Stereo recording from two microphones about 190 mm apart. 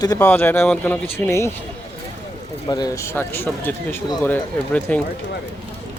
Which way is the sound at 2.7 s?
20° left (ahead or behind).